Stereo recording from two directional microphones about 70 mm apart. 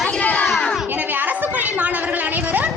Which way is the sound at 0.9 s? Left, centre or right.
Right.